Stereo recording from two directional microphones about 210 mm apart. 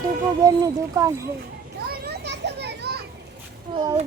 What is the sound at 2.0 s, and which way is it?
Children playing, 55° right (ahead or behind).